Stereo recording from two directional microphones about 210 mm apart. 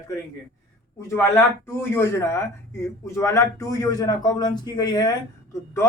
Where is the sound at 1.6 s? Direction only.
10° left (ahead or behind).